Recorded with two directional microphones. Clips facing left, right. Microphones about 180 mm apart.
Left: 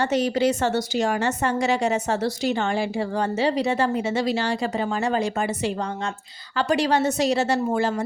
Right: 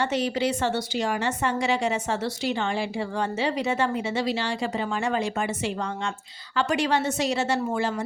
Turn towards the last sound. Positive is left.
turn(degrees=40)  # may be behind; listen again after turning